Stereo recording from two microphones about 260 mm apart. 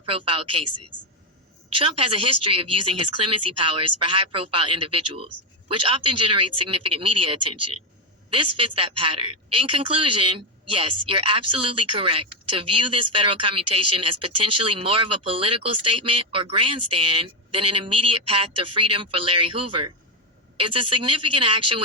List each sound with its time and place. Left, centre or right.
0.0 s speech: centre
7.4 s speech: right
8.5 s a woman's voice: right